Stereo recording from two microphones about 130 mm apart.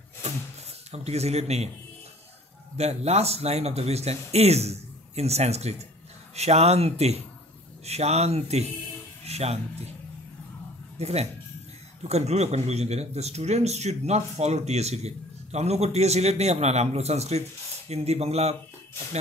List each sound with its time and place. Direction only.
0.9 s speech: 55° right (ahead or behind)
2.8 s speech: 55° right (ahead or behind)
11.0 s speech: 55° right (ahead or behind)